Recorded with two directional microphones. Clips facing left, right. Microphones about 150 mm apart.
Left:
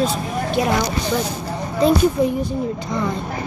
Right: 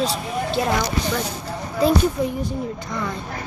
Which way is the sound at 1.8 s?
5° right (ahead or behind).